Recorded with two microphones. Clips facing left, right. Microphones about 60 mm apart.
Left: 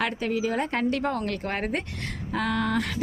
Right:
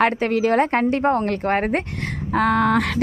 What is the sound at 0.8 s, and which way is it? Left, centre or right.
A woman's voice, right.